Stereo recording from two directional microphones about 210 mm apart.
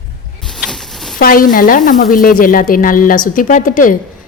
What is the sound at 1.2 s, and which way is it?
A woman's voice, 40° left (ahead or behind).